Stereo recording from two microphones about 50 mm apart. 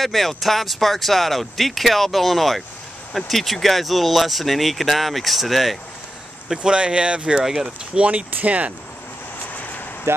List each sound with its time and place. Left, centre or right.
0.0 s speech: centre
6.5 s speech: centre
7.3 s speech: centre
8.0 s speech: right
9.5 s a sound: left
10.1 s speech: right